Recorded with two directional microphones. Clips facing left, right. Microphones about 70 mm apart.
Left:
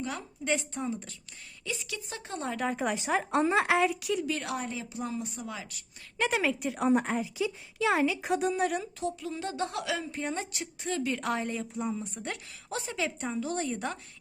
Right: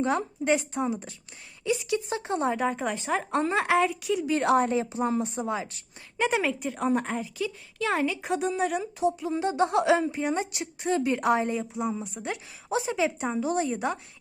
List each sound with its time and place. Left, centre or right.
0.0 s a woman's voice: right
0.4 s speech: right
2.6 s a woman's voice: centre
4.3 s a woman's voice: right
6.1 s a woman's voice: centre
8.8 s a woman's voice: centre; by 10.1 s right
10.1 s a woman's voice: centre